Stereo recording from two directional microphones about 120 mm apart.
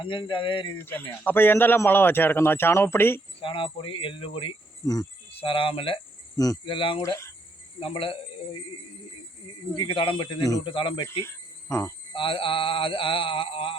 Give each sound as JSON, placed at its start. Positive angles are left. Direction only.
{"t": 0.0, "sound": "speech", "side_deg": 45}
{"t": 0.8, "sound": "a man's voice", "side_deg": 15}
{"t": 3.4, "sound": "speech", "side_deg": 45}
{"t": 6.3, "sound": "speech", "side_deg": 30}
{"t": 6.7, "sound": "speech", "side_deg": 45}
{"t": 7.0, "sound": "a man's voice", "side_deg": 25}
{"t": 7.8, "sound": "speech", "side_deg": 50}
{"t": 11.0, "sound": "speech", "side_deg": 25}
{"t": 12.1, "sound": "speech", "side_deg": 45}